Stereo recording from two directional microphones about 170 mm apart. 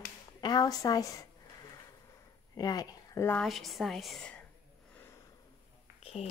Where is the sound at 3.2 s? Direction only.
5° left (ahead or behind).